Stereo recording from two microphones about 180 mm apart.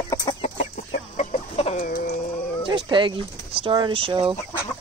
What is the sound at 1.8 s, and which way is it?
Bird, 50° left (ahead or behind).